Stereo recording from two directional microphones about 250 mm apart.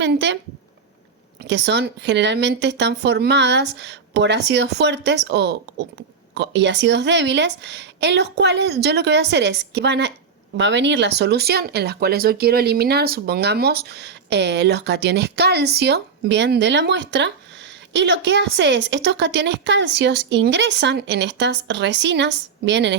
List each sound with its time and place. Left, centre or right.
0.0 s speech: right
1.4 s speech: right